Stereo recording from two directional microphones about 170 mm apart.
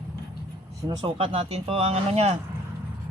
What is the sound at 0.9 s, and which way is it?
Speech, 30° right (ahead or behind).